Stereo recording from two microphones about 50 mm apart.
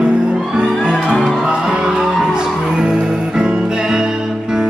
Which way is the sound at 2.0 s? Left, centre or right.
Centre.